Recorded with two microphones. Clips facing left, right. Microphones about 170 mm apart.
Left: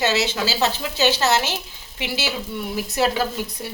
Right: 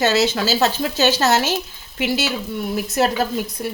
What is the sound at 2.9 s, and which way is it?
Speech, 50° right (ahead or behind).